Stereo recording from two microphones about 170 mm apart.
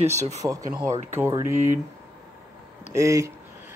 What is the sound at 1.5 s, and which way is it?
Speech, 45° right (ahead or behind).